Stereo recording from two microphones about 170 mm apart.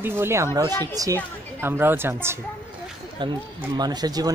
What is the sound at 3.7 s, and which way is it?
Speech, 25° right (ahead or behind).